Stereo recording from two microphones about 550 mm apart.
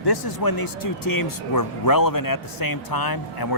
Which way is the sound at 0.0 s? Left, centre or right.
Left.